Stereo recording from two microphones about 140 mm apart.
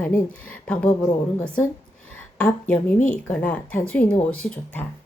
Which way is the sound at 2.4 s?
10° left (ahead or behind).